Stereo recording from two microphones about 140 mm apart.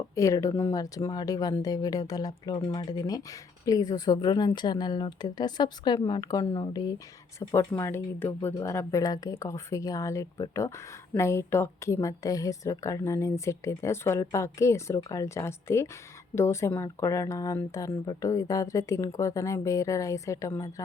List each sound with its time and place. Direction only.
0.2 s a woman's voice: 25° left (ahead or behind)